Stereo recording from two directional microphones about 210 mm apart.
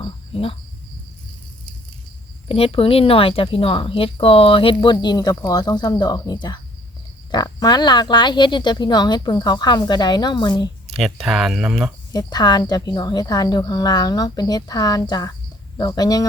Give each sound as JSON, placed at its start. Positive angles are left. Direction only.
{"t": 0.0, "sound": "cricket", "side_deg": 25}
{"t": 2.5, "sound": "speech", "side_deg": 25}
{"t": 10.8, "sound": "speech", "side_deg": 0}
{"t": 12.1, "sound": "speech", "side_deg": 20}